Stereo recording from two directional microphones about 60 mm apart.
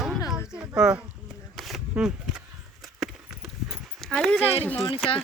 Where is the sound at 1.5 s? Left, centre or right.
Centre.